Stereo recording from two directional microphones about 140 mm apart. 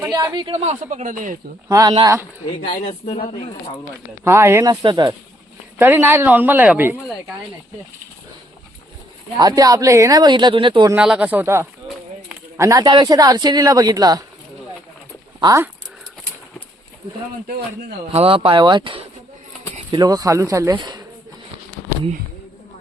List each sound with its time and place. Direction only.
0.1 s speech: 30° right (ahead or behind)
0.6 s speech: 50° right (ahead or behind); by 1.4 s 70° right (ahead or behind)
1.6 s speech: 25° right (ahead or behind)
2.6 s speech: 45° left (ahead or behind)
4.2 s speech: 20° right (ahead or behind)
5.8 s speech: 15° right (ahead or behind)
9.4 s speech: 25° right (ahead or behind)
10.9 s speech: 10° right (ahead or behind); by 14.3 s 25° right (ahead or behind)
15.4 s speech: 25° right (ahead or behind)
18.1 s speech: 45° right (ahead or behind)